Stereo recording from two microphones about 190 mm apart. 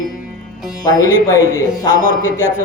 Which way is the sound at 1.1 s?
10° right (ahead or behind).